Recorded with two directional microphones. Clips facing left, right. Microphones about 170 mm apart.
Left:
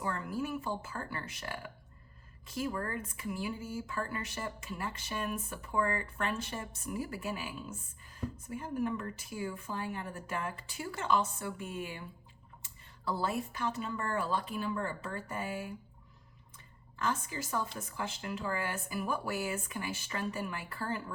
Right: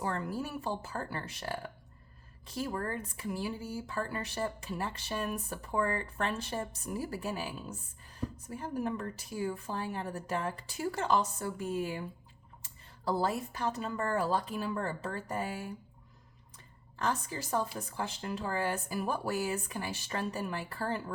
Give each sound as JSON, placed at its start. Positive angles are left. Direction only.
{"t": 0.0, "sound": "speech", "side_deg": -35}
{"t": 17.0, "sound": "speech", "side_deg": -35}